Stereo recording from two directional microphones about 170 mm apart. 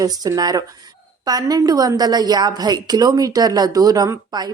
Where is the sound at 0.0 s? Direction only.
20° right (ahead or behind).